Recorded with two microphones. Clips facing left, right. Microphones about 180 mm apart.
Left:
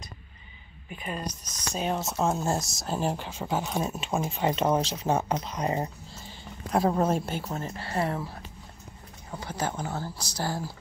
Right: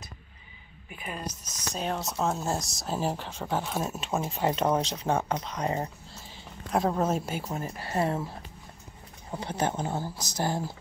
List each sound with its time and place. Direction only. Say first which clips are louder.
0.8 s speech: left 2 dB; 10° right (ahead or behind)
1.8 s speech: left 2 dB; 5° left (ahead or behind)
6.2 s speech: left 3 dB; centre (ahead or behind); by 8.3 s 20° right (ahead or behind)
9.3 s speech: right 3 dB; 25° right (ahead or behind)